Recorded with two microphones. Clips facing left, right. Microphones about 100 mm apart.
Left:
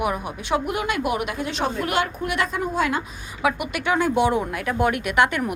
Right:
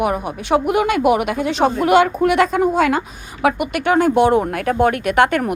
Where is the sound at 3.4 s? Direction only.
55° right (ahead or behind).